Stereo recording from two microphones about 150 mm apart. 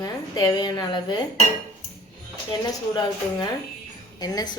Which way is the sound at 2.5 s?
30° left (ahead or behind).